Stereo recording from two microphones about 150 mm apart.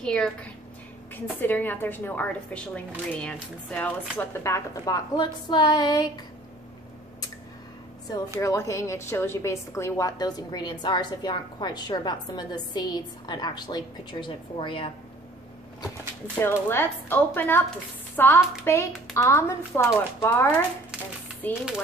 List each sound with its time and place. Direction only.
0.0 s a woman's voice: 5° left (ahead or behind)
4.2 s a woman's voice: 20° left (ahead or behind)
8.4 s a woman's voice: 20° left (ahead or behind)
16.3 s a woman's voice: 15° left (ahead or behind)